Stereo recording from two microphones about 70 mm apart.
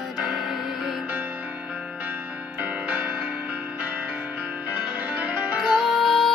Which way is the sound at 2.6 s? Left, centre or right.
Right.